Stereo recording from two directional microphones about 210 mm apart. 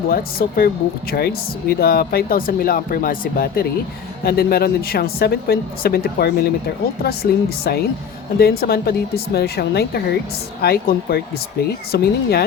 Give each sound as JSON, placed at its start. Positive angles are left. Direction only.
{"t": 0.1, "sound": "speech", "side_deg": 45}